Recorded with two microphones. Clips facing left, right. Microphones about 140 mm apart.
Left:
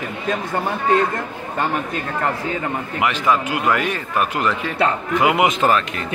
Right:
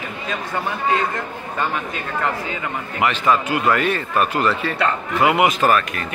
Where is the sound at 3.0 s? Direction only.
10° left (ahead or behind).